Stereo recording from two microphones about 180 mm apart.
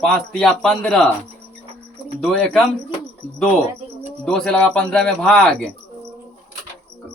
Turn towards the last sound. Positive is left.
turn(degrees=5)  # may be behind; listen again after turning